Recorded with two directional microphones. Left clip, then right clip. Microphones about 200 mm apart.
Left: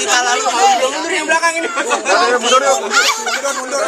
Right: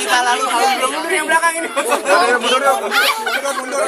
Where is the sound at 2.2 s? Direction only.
15° left (ahead or behind).